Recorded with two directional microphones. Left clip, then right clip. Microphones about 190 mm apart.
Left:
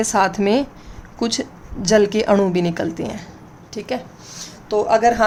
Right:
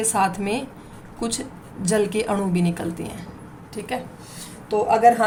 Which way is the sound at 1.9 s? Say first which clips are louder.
Left 7 dB; 40° left (ahead or behind).